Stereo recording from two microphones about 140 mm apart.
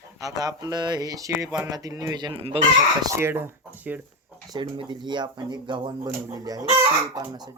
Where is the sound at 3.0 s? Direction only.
20° right (ahead or behind).